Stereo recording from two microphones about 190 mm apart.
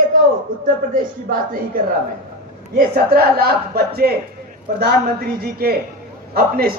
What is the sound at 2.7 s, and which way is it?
A man's voice, 55° right (ahead or behind).